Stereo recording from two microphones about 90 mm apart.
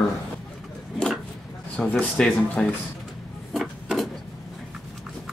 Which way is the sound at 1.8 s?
10° left (ahead or behind).